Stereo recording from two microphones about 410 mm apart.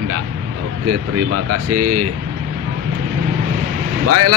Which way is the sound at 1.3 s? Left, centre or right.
Right.